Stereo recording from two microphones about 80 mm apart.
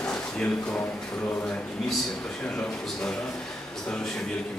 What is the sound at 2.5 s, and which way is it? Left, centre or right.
Speech, centre.